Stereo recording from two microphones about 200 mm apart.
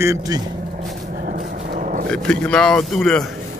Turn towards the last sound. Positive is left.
turn(degrees=5)  # may be behind; listen again after turning